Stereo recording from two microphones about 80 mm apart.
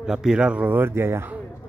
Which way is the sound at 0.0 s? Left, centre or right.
Centre.